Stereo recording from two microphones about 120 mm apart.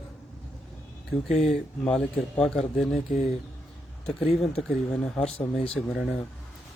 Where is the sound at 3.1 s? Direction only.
65° left (ahead or behind).